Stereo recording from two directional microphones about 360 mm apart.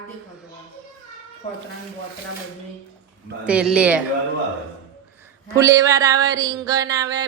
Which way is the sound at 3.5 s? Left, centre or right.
Centre.